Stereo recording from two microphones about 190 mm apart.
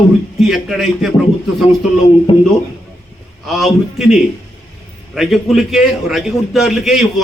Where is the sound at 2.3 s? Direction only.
30° left (ahead or behind).